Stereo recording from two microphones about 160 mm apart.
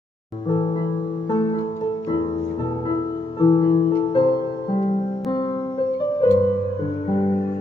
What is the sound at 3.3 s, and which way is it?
Music, 30° left (ahead or behind).